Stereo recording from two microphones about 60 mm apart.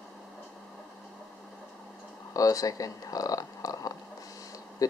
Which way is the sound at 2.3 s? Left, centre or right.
Left.